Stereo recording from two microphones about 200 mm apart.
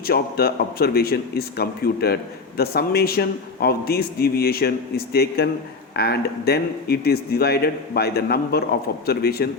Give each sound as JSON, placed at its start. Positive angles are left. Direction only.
{"t": 0.1, "sound": "a man's voice", "side_deg": 50}